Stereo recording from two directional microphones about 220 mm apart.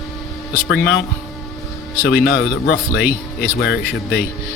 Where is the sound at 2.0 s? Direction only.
45° left (ahead or behind).